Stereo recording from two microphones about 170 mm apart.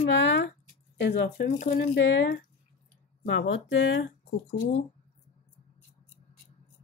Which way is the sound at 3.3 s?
90° left.